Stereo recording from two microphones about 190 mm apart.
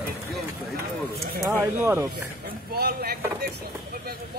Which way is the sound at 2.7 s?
55° right (ahead or behind).